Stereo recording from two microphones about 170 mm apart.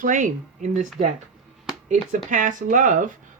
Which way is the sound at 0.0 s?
50° right (ahead or behind).